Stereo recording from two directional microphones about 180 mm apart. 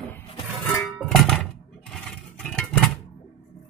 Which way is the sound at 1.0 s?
Centre (ahead or behind).